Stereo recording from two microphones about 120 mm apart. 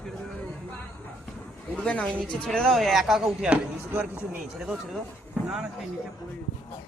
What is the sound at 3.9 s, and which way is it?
Speech, 15° right (ahead or behind).